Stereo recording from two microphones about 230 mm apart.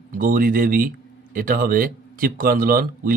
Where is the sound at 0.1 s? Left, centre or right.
Right.